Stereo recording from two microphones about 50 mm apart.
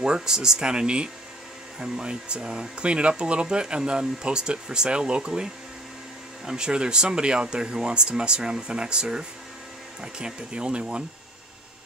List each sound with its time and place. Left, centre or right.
0.0 s speech: centre